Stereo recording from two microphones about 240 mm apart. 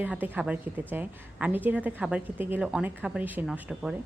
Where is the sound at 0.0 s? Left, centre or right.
Centre.